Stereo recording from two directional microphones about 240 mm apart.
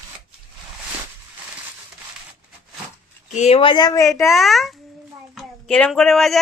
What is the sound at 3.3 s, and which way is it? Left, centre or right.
Speech, left.